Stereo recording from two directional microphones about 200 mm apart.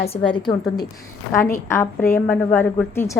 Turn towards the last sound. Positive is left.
turn(degrees=10)  # may be behind; listen again after turning